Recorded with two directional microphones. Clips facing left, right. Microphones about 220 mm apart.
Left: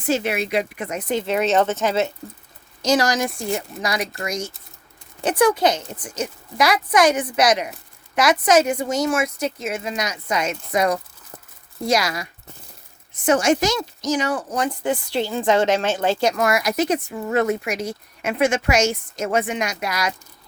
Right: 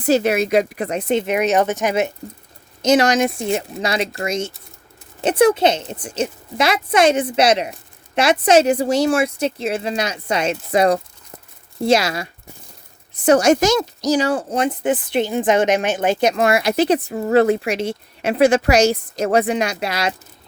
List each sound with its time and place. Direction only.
0.0 s a woman's voice: 40° right (ahead or behind)
13.2 s a woman's voice: 40° right (ahead or behind)